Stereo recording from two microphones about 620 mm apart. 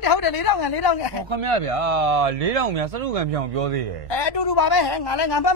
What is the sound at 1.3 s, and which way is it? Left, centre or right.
Speech, right.